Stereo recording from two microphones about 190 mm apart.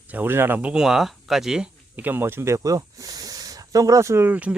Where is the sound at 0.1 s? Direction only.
10° right (ahead or behind).